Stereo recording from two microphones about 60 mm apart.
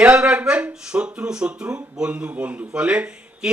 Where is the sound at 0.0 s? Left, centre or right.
Centre.